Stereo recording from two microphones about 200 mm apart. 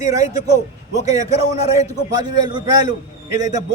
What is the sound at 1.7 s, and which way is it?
A man's voice, 20° right (ahead or behind).